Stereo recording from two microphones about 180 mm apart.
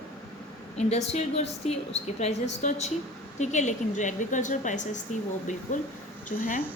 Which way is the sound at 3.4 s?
40° left (ahead or behind).